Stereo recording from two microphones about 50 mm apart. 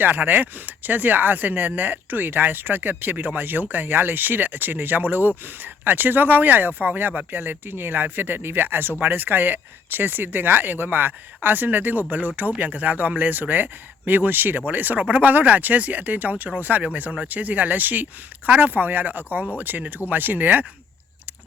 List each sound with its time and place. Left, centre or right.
0.0 s speech: right
7.3 s speech: right